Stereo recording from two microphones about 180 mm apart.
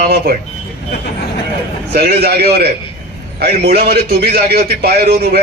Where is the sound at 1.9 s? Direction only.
60° right (ahead or behind).